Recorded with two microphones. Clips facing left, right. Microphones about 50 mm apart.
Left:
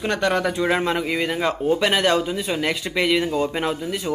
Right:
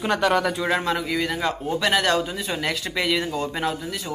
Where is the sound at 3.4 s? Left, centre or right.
Left.